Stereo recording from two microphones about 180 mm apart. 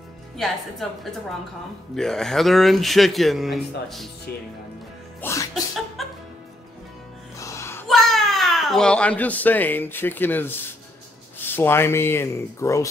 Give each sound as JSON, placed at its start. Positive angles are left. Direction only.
{"t": 0.8, "sound": "speech", "side_deg": 0}
{"t": 5.2, "sound": "music", "side_deg": 15}
{"t": 6.0, "sound": "music", "side_deg": 0}
{"t": 7.3, "sound": "music", "side_deg": 15}
{"t": 7.9, "sound": "a child's voice", "side_deg": 0}